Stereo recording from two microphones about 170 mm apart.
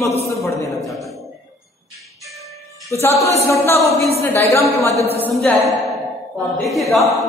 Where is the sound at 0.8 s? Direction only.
Centre (ahead or behind).